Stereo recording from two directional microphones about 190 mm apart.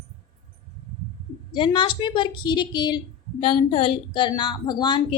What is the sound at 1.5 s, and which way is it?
A woman's voice, 25° left (ahead or behind).